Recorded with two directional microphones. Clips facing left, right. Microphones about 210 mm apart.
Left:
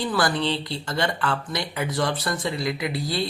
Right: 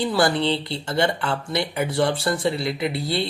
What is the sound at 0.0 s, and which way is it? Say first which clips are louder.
Speech: right 3 dB; 25° right (ahead or behind).